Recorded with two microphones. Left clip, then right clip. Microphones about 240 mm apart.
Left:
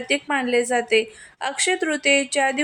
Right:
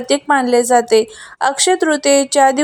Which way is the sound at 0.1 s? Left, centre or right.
Right.